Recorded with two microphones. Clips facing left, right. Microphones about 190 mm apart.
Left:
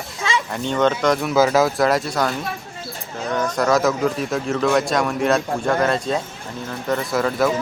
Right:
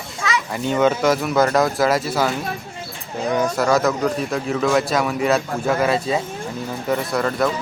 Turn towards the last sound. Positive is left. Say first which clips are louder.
# left 1 dB
turn(degrees=0)  # may be behind; listen again after turning